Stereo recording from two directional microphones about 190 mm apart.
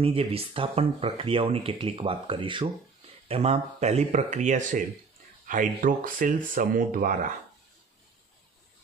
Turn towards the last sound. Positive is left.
turn(degrees=-45)  # may be behind; listen again after turning